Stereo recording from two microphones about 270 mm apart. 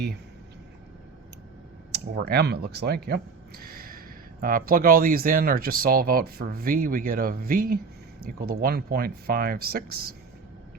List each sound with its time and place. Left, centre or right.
1.9 s speech: right